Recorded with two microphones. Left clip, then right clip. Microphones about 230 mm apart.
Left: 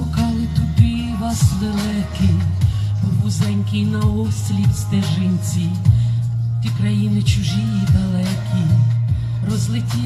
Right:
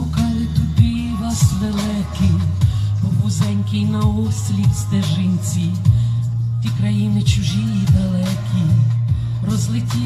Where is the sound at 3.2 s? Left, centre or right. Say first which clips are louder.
Even; centre.